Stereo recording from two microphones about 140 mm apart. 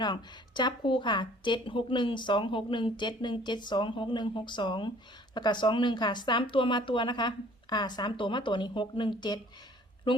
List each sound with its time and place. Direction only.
0.0 s a woman's voice: 30° left (ahead or behind)